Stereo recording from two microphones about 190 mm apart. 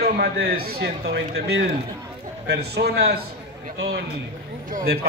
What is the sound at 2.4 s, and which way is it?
Speech, 60° right (ahead or behind).